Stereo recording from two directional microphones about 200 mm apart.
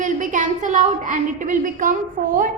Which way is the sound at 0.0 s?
40° right (ahead or behind).